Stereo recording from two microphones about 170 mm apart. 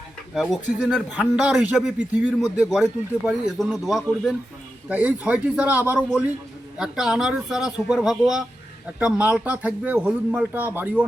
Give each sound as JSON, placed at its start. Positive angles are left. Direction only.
{"t": 0.8, "sound": "speech", "side_deg": 0}